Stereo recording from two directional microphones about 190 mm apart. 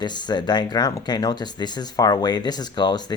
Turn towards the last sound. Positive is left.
turn(degrees=20)  # may be behind; listen again after turning